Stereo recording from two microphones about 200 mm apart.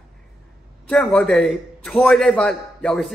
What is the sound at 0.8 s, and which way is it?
A man's voice, 5° left (ahead or behind).